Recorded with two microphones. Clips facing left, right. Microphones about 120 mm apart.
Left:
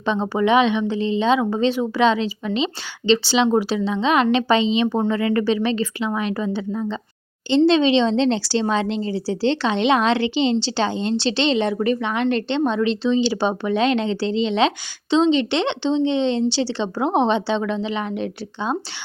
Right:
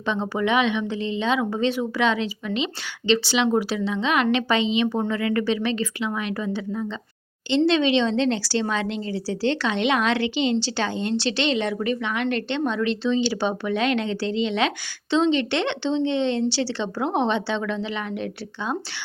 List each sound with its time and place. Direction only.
0.0 s a woman's voice: 30° left (ahead or behind)